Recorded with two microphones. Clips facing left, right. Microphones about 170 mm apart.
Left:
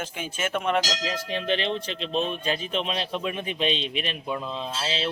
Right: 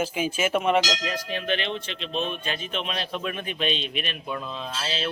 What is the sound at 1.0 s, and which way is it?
Speech, 25° left (ahead or behind).